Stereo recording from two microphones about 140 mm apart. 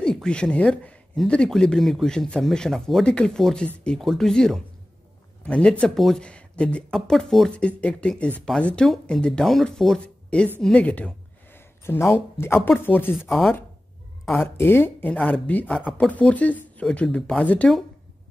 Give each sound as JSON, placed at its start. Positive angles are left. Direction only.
{"t": 0.0, "sound": "speech", "side_deg": 5}
{"t": 10.6, "sound": "a sound", "side_deg": 10}
{"t": 12.1, "sound": "speech", "side_deg": 15}
{"t": 14.4, "sound": "speech", "side_deg": 15}
{"t": 15.8, "sound": "speech", "side_deg": 0}
{"t": 16.1, "sound": "speech", "side_deg": 10}